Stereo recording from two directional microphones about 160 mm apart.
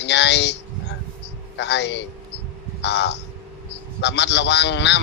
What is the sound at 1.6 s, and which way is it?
A man's voice, 90° left.